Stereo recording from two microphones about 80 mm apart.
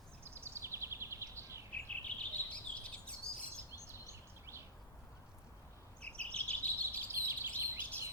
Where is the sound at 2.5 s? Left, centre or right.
Centre.